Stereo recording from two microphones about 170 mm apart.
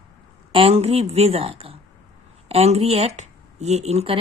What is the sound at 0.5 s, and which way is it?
Speech, 35° right (ahead or behind).